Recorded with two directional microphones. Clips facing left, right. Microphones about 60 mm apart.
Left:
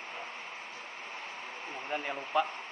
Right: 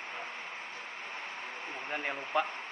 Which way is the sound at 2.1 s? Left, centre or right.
Centre.